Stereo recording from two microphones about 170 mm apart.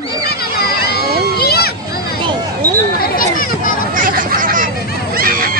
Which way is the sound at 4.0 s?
55° right (ahead or behind).